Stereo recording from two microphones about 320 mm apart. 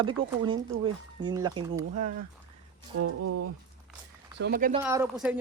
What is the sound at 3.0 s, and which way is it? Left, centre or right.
Speech, right.